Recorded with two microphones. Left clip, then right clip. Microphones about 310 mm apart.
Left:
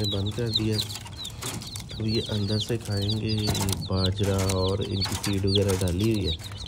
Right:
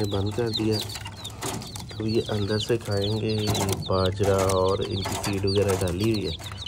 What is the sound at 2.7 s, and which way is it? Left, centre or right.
Speech, right.